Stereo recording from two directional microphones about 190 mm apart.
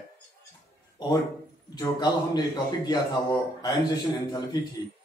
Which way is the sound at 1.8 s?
20° left (ahead or behind).